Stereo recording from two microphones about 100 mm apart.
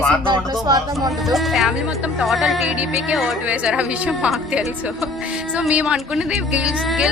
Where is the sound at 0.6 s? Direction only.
40° right (ahead or behind).